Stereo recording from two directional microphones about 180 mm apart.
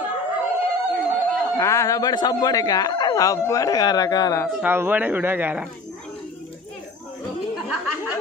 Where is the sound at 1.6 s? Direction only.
15° left (ahead or behind).